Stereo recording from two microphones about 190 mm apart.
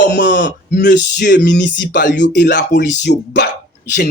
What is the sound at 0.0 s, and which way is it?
A man's voice, 65° left (ahead or behind).